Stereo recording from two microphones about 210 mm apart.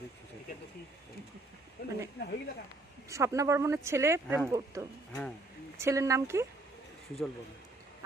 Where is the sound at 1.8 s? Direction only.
50° left (ahead or behind).